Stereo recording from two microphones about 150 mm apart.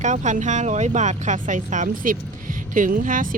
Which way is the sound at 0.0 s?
50° right (ahead or behind).